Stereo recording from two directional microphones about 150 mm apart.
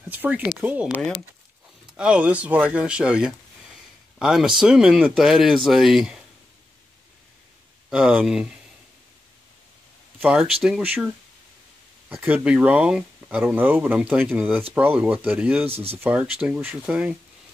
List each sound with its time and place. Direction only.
0.1 s speech: 10° right (ahead or behind)
2.0 s speech: 10° right (ahead or behind)
7.9 s speech: 5° right (ahead or behind)
10.2 s speech: 5° right (ahead or behind)
12.1 s speech: 10° right (ahead or behind)
15.7 s speech: 40° right (ahead or behind)
16.0 s speech: 10° right (ahead or behind)